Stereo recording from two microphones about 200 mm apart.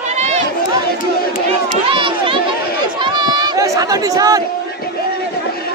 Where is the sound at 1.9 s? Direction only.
25° right (ahead or behind).